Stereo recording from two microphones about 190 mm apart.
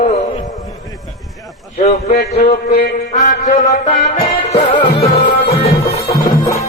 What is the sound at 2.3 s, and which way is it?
Music, 50° left (ahead or behind).